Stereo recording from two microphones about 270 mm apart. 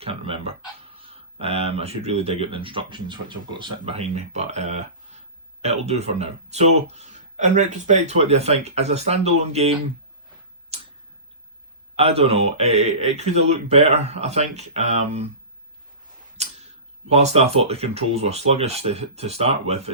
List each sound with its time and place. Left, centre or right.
0.0 s a sound: right
0.9 s speech: right
10.7 s tick-tock: right
11.9 s speech: right
16.4 s tick-tock: right
17.1 s speech: right